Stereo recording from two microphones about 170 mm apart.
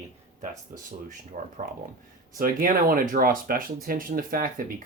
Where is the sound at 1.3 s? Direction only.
50° right (ahead or behind).